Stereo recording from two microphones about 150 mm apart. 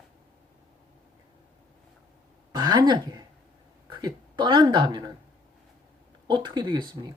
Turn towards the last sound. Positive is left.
turn(degrees=-30)  # may be behind; listen again after turning